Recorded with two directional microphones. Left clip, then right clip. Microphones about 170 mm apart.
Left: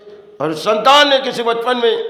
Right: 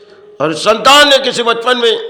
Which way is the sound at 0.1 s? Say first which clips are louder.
Right 5 dB; 15° right (ahead or behind).